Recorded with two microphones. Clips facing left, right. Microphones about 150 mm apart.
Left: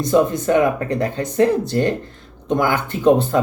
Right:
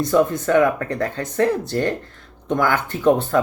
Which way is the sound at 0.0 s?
15° left (ahead or behind).